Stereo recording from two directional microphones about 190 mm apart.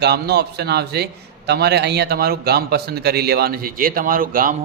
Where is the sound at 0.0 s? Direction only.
60° right (ahead or behind).